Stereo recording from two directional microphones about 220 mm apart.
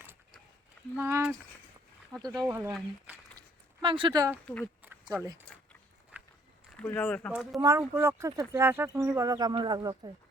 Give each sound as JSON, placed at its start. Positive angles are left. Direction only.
{"t": 0.9, "sound": "speech", "side_deg": -10}
{"t": 3.8, "sound": "speech", "side_deg": -25}
{"t": 4.6, "sound": "a sound", "side_deg": -10}
{"t": 5.2, "sound": "speech", "side_deg": -15}
{"t": 6.1, "sound": "walk", "side_deg": -5}
{"t": 6.7, "sound": "speech", "side_deg": 5}
{"t": 7.6, "sound": "speech", "side_deg": -10}